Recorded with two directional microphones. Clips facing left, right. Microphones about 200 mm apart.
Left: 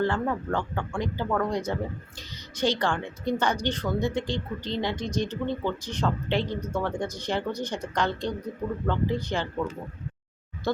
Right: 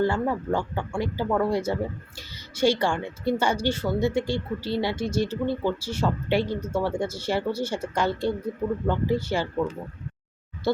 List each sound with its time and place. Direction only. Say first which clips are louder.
0.0 s speech: right 2 dB; 10° right (ahead or behind)